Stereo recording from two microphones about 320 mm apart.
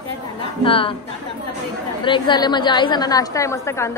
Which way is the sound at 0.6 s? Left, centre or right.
Centre.